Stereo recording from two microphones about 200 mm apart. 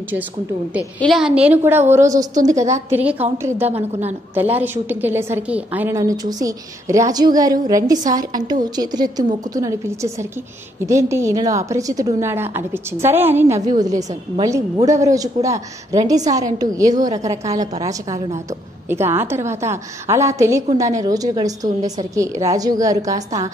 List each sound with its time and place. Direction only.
0.7 s a woman's voice: centre (ahead or behind); by 2.5 s 20° right (ahead or behind)
2.5 s a woman's voice: 35° right (ahead or behind)
2.9 s a woman's voice: 5° right (ahead or behind)
3.7 s a woman's voice: 30° right (ahead or behind)
4.4 s a woman's voice: 10° right (ahead or behind)